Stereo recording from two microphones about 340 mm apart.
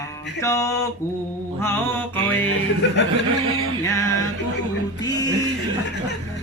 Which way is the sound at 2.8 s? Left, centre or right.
Left.